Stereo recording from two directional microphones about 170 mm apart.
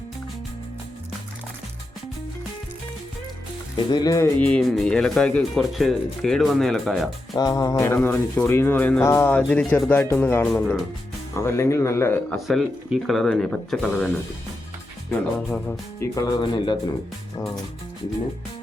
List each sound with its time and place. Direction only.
3.8 s speech: 25° left (ahead or behind)
4.4 s speech: 5° left (ahead or behind)
7.3 s speech: 20° left (ahead or behind); by 10.8 s 5° left (ahead or behind)
11.4 s speech: 15° left (ahead or behind)
12.4 s speech: centre (ahead or behind)
15.4 s speech: 5° left (ahead or behind)
16.0 s speech: 20° left (ahead or behind)